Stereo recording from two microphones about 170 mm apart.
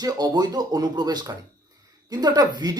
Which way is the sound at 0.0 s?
20° right (ahead or behind).